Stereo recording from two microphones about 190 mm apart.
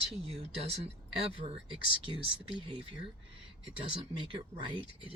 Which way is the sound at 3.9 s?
25° right (ahead or behind).